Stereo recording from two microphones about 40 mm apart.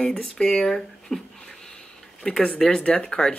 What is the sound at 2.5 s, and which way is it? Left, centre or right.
Speech, left.